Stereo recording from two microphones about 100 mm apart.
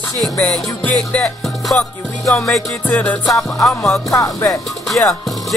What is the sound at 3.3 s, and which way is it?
Music, 5° left (ahead or behind).